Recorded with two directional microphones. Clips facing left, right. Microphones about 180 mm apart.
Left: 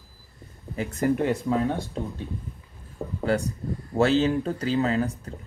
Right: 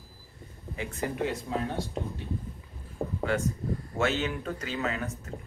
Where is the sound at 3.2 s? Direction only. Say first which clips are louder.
Left 5 dB; 35° left (ahead or behind).